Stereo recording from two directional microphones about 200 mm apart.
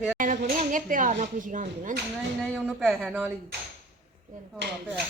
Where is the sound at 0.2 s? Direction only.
40° right (ahead or behind).